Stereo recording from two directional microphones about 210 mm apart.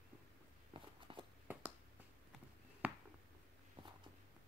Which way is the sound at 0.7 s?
25° right (ahead or behind).